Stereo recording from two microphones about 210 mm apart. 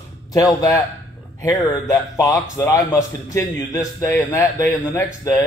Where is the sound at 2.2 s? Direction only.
15° left (ahead or behind).